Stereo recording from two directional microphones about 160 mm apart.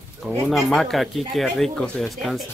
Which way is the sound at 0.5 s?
Centre (ahead or behind).